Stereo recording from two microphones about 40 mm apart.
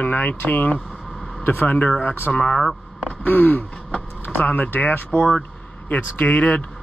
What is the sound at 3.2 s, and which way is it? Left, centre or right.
Speech, left.